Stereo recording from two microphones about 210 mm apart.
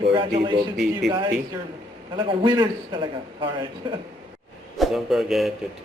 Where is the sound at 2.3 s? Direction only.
20° right (ahead or behind).